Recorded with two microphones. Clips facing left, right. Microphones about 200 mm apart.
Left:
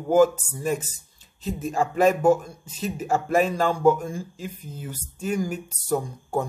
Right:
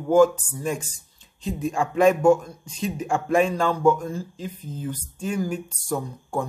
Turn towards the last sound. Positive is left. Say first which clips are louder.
# left 3 dB
turn(degrees=15)  # may be behind; listen again after turning